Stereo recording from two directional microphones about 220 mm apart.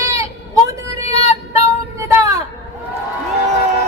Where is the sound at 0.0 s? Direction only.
15° right (ahead or behind).